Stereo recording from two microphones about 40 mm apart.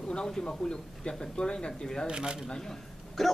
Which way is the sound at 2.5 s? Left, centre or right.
Centre.